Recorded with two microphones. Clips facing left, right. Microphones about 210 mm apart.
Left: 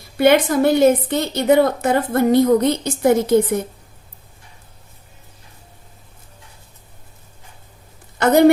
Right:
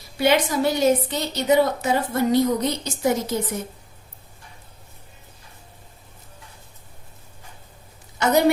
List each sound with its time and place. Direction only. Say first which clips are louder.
0.2 s a woman's voice: left 6 dB; 55° left (ahead or behind)
8.2 s a woman's voice: left 6 dB; 55° left (ahead or behind)